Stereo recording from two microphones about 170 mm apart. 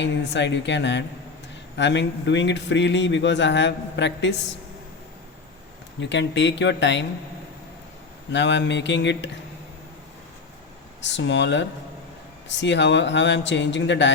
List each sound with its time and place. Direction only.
0.0 s speech: 90° left
6.0 s speech: 90° left
8.3 s speech: 90° left
11.0 s speech: 90° left